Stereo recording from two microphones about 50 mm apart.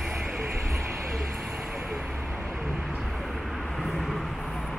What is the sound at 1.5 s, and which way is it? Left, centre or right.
Vehicle, centre.